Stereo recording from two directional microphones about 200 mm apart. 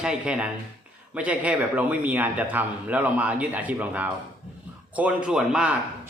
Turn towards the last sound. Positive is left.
turn(degrees=-5)  # may be behind; listen again after turning